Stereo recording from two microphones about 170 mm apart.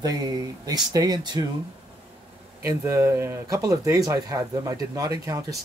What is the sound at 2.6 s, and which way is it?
Speech, 15° right (ahead or behind).